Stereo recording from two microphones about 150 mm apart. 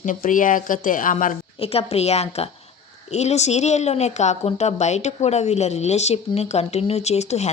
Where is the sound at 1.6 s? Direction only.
40° left (ahead or behind).